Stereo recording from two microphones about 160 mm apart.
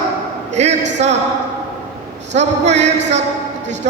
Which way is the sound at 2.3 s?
45° right (ahead or behind).